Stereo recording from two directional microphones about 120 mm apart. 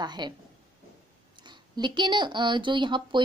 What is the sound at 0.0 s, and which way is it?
Speech, 35° right (ahead or behind).